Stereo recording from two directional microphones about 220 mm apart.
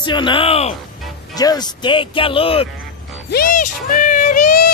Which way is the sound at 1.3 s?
15° left (ahead or behind).